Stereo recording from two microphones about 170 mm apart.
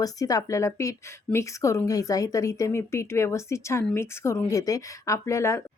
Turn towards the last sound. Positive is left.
turn(degrees=15)  # may be behind; listen again after turning